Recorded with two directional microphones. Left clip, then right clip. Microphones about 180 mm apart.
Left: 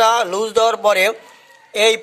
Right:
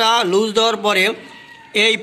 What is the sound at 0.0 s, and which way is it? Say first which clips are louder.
Speech: even; 60° left (ahead or behind).